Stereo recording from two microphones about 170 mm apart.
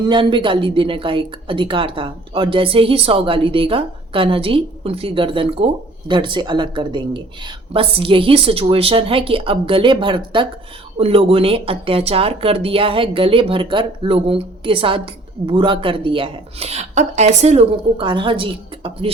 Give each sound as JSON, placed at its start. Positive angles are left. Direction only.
{"t": 0.0, "sound": "speech", "side_deg": -30}